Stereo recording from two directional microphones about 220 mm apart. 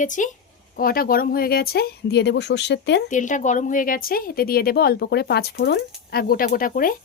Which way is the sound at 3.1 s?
35° left (ahead or behind).